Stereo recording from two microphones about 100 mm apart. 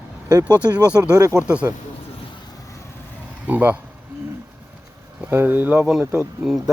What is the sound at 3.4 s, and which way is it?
Speech, 20° right (ahead or behind).